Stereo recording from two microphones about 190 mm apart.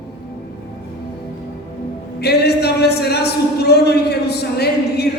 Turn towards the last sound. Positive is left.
turn(degrees=60)  # may be behind; listen again after turning